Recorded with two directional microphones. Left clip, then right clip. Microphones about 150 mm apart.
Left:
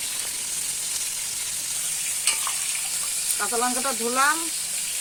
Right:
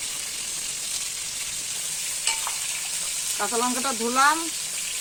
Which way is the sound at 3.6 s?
55° right (ahead or behind).